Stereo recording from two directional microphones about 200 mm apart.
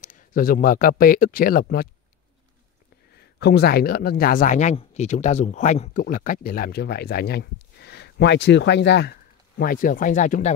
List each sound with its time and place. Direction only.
0.0 s speech: 40° left (ahead or behind)
3.3 s speech: 55° left (ahead or behind)
9.6 s speech: 45° left (ahead or behind)